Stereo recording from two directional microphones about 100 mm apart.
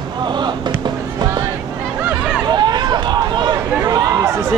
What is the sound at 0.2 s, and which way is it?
Music, 45° right (ahead or behind).